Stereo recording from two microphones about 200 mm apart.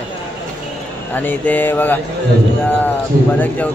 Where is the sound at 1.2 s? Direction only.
10° left (ahead or behind).